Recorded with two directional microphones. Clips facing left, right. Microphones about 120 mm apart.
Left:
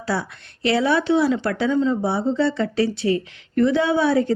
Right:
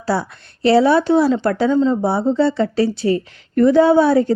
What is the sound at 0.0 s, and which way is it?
A woman's voice, 35° right (ahead or behind).